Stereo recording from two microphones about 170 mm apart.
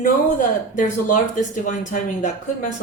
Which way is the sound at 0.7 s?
50° left (ahead or behind).